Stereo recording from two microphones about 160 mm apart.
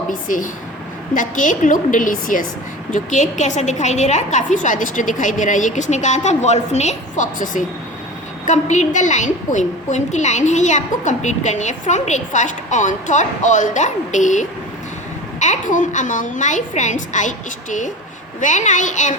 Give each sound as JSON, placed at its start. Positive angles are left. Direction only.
{"t": 0.1, "sound": "a woman's voice", "side_deg": 55}